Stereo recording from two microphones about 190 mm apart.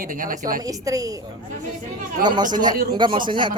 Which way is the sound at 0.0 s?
45° right (ahead or behind).